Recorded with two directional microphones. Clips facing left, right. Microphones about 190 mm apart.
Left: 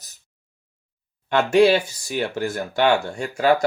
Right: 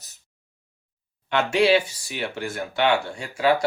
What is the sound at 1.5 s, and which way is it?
Speech, 45° left (ahead or behind).